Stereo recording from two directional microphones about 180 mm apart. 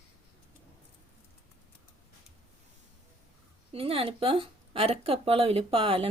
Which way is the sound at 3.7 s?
30° right (ahead or behind).